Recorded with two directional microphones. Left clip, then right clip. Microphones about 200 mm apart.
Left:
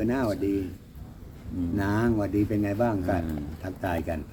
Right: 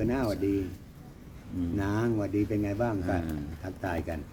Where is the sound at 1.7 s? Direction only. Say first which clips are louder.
Left 4 dB; 20° left (ahead or behind).